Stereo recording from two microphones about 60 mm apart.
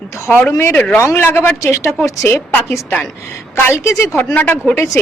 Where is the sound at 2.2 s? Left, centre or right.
Left.